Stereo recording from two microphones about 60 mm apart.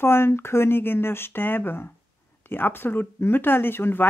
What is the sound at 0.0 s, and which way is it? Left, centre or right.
Speech, left.